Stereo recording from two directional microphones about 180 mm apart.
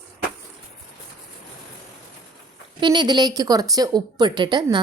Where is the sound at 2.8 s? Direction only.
25° right (ahead or behind).